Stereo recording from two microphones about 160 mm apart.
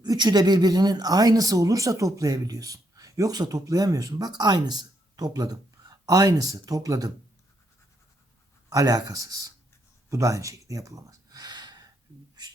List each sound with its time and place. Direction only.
0.0 s speech: 25° right (ahead or behind)
8.7 s speech: 20° right (ahead or behind)
10.1 s gasp: 20° right (ahead or behind)